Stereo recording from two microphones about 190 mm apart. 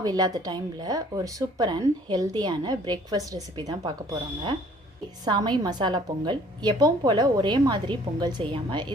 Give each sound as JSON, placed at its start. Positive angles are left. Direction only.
{"t": 0.0, "sound": "speech", "side_deg": -20}
{"t": 5.2, "sound": "speech", "side_deg": -20}